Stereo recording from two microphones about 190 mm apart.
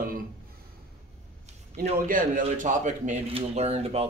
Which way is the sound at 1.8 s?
45° right (ahead or behind).